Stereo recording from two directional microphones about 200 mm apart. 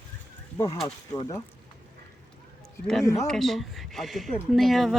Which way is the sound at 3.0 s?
15° left (ahead or behind).